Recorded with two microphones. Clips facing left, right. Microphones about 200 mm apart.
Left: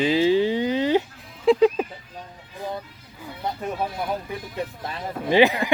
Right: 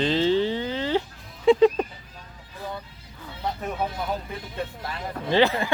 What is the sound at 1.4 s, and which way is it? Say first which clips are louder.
Speech: even; centre (ahead or behind).